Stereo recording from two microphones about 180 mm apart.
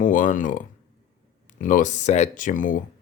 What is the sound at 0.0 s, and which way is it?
Speech, 50° left (ahead or behind).